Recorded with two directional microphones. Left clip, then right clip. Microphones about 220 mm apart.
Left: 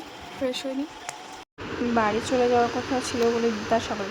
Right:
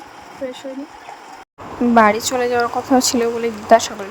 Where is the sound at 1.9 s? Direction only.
50° right (ahead or behind).